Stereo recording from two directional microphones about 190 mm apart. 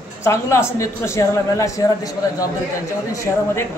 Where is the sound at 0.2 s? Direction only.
15° left (ahead or behind).